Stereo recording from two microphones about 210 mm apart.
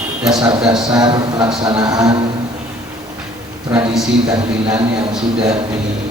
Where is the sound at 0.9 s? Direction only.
20° right (ahead or behind).